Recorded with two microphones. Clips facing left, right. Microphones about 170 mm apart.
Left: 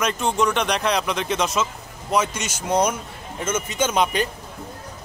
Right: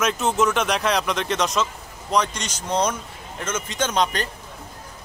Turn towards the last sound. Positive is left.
turn(degrees=10)  # may be behind; listen again after turning